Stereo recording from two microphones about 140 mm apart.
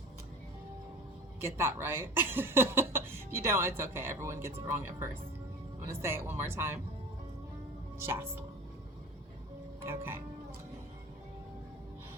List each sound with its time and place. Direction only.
1.4 s speech: 15° right (ahead or behind)
7.9 s speech: 20° right (ahead or behind)
9.8 s speech: 15° right (ahead or behind)